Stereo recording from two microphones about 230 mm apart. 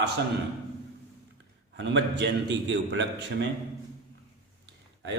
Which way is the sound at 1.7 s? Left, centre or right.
Right.